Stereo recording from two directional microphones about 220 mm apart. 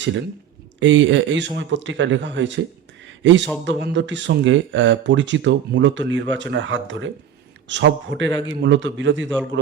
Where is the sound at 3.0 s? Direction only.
55° right (ahead or behind).